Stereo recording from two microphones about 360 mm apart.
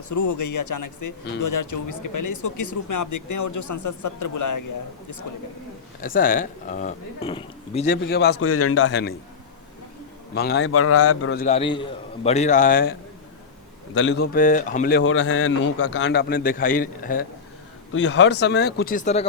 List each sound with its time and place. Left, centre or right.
0.1 s speech: left
6.0 s a man's voice: left
8.0 s a man's voice: left
10.3 s a man's voice: left
11.4 s a man's voice: centre
13.9 s a man's voice: left